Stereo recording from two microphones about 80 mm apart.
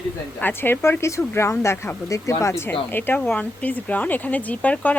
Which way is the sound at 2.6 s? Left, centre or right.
Left.